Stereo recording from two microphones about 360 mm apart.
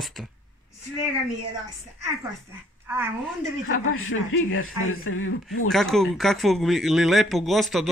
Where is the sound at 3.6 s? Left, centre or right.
Left.